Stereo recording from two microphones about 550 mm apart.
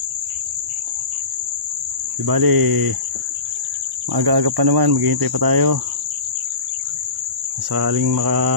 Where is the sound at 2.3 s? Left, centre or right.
Right.